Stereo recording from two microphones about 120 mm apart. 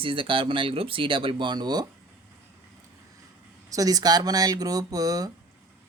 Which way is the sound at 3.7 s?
30° right (ahead or behind).